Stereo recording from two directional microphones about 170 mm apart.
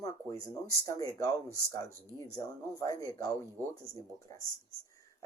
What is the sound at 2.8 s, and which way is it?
Speech, 20° left (ahead or behind).